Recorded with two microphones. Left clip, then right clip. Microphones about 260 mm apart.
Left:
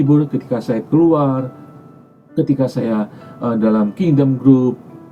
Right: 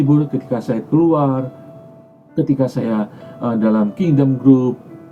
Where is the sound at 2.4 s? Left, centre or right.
Centre.